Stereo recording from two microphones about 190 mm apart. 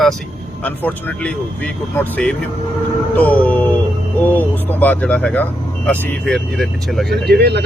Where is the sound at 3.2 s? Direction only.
10° left (ahead or behind).